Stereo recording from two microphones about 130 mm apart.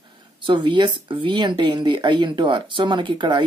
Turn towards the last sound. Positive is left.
turn(degrees=-35)  # may be behind; listen again after turning